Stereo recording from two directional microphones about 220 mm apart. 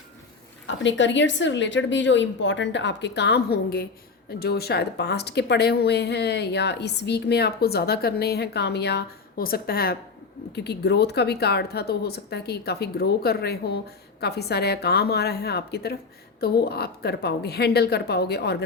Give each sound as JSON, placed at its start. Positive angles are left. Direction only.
{"t": 0.7, "sound": "a woman's voice", "side_deg": 55}